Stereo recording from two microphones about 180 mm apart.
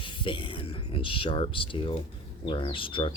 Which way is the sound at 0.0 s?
30° left (ahead or behind).